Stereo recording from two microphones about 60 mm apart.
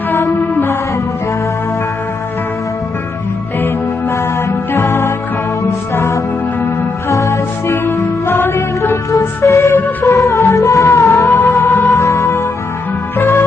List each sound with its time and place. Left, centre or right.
0.2 s music: left
4.1 s music: left
8.3 s music: left
11.6 s music: left
11.9 s music: left